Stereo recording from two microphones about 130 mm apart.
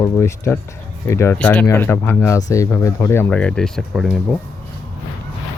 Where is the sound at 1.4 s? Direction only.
10° left (ahead or behind).